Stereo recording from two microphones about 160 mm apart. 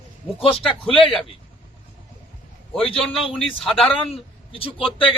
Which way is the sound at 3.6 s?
Centre (ahead or behind).